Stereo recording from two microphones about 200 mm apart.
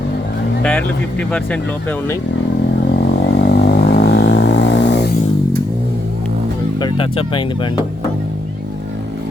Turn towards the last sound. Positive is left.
turn(degrees=25)  # may be behind; listen again after turning